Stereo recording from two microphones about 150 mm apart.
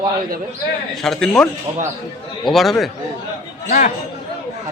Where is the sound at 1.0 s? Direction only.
5° left (ahead or behind).